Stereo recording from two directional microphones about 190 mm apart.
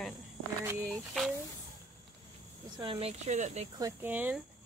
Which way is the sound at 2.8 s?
30° right (ahead or behind).